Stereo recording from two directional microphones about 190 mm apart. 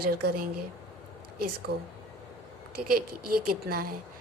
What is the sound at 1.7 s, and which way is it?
Speech, 55° right (ahead or behind).